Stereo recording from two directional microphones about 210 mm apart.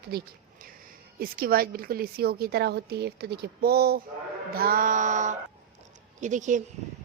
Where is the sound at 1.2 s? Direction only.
45° right (ahead or behind).